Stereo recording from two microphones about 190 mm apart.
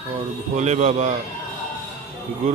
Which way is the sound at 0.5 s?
40° right (ahead or behind).